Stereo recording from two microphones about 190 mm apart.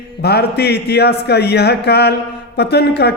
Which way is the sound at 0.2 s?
60° left (ahead or behind).